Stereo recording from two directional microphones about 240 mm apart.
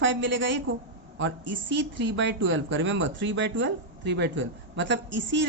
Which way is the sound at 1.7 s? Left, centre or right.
Right.